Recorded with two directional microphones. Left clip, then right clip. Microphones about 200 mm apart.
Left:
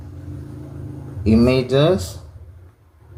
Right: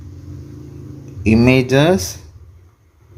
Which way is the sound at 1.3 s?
45° right (ahead or behind).